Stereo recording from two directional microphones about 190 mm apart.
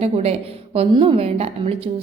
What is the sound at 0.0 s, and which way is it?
A woman's voice, 30° right (ahead or behind).